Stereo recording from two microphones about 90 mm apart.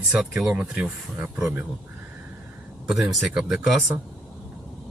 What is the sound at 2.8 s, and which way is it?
Speech, 10° right (ahead or behind).